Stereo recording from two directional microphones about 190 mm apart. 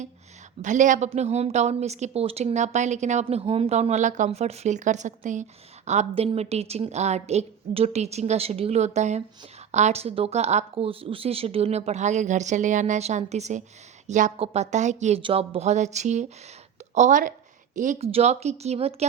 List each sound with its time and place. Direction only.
0.6 s speech: 40° right (ahead or behind)